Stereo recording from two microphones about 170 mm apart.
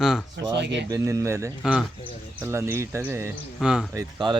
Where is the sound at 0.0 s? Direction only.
Centre (ahead or behind).